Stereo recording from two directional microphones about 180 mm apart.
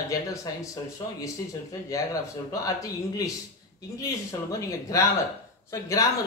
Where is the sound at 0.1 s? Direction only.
20° left (ahead or behind).